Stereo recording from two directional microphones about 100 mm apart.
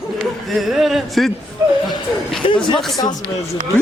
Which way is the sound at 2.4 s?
65° left (ahead or behind).